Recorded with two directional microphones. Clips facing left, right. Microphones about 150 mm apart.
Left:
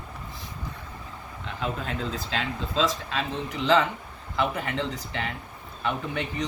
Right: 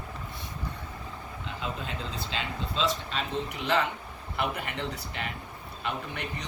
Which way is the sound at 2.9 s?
90° left.